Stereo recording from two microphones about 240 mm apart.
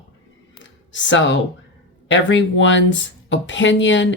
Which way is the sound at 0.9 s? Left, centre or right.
Left.